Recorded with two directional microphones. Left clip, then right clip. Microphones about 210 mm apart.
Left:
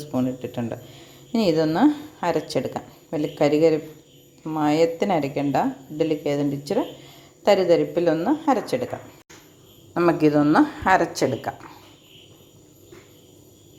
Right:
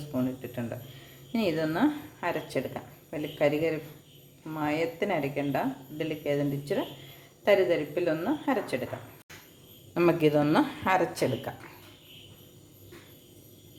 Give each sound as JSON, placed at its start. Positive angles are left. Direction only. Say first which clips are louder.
{"t": 0.1, "sound": "a woman's voice", "louder": "left 6 dB", "side_deg": 40}
{"t": 9.9, "sound": "speech", "louder": "left 5 dB", "side_deg": 10}
{"t": 10.8, "sound": "a woman's voice", "louder": "left 7 dB", "side_deg": 25}